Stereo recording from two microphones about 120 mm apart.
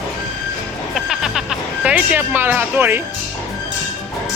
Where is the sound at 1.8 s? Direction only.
10° right (ahead or behind).